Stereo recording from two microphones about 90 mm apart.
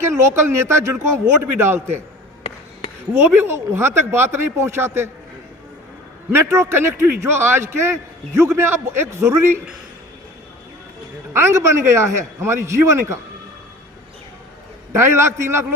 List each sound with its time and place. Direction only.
0.0 s a man's voice: 30° right (ahead or behind)
3.1 s speech: 30° right (ahead or behind)
6.3 s speech: 30° right (ahead or behind)
11.3 s a man's voice: 30° right (ahead or behind)
14.9 s speech: 30° right (ahead or behind)